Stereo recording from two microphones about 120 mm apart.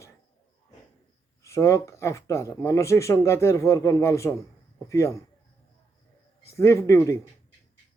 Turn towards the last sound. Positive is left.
turn(degrees=25)  # may be behind; listen again after turning